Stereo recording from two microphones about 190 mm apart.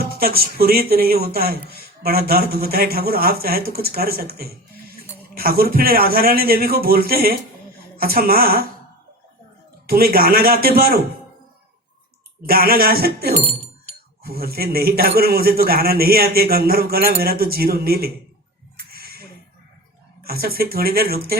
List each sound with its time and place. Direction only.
0.0 s speech: 55° right (ahead or behind)
9.8 s speech: 50° right (ahead or behind)
12.5 s speech: 50° right (ahead or behind)
18.9 s a sound: 55° right (ahead or behind)
20.2 s speech: 55° right (ahead or behind)